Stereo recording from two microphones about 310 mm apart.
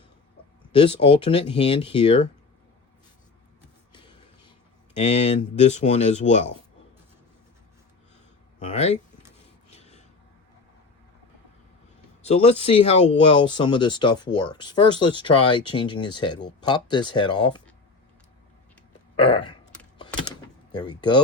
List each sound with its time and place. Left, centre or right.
0.8 s speech: centre
4.9 s speech: left
8.7 s speech: left
9.6 s a sound: left
12.2 s speech: centre
19.1 s a sound: centre
20.7 s speech: centre